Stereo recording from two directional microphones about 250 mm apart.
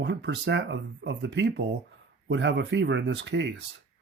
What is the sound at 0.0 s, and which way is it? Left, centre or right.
Speech, right.